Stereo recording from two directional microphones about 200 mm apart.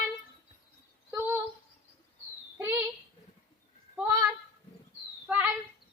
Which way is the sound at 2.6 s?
10° right (ahead or behind).